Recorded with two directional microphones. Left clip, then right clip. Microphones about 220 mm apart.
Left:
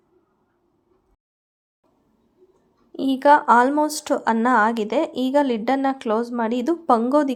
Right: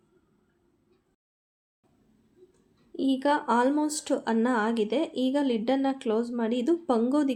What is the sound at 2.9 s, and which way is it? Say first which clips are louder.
Speech: left 10 dB; 20° left (ahead or behind).